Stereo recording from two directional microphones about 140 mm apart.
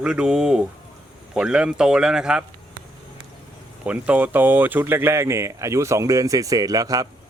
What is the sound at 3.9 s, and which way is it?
Speech, 10° right (ahead or behind).